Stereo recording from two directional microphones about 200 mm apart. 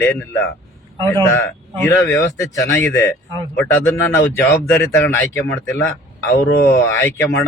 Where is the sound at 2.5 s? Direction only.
15° left (ahead or behind).